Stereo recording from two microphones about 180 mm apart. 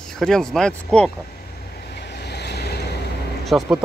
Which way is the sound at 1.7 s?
65° left (ahead or behind).